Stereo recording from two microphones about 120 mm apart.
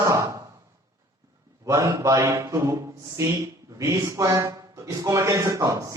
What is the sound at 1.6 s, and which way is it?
A man's voice, 25° right (ahead or behind).